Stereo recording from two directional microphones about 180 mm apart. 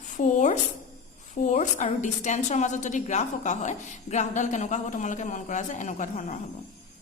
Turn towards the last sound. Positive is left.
turn(degrees=45)  # may be behind; listen again after turning